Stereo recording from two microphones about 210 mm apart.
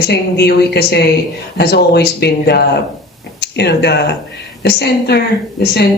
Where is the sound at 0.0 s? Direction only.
50° left (ahead or behind).